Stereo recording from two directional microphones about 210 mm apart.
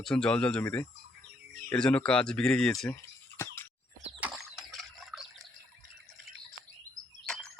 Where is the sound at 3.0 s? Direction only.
10° left (ahead or behind).